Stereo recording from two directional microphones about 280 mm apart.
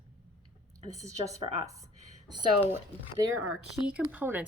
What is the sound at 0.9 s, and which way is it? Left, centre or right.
Speech, centre.